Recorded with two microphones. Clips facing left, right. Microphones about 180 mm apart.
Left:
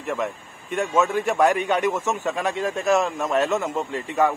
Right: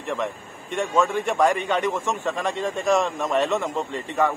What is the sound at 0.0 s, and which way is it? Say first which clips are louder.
A man's voice: left 1 dB; 5° left (ahead or behind).